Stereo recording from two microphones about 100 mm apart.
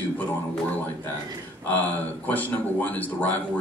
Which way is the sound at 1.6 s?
20° left (ahead or behind).